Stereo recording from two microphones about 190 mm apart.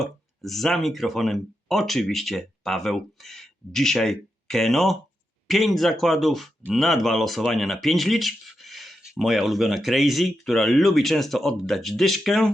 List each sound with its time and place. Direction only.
0.0 s speech: centre (ahead or behind)